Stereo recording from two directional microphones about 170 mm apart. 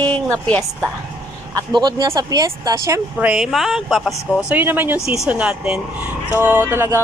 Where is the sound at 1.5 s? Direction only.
25° right (ahead or behind).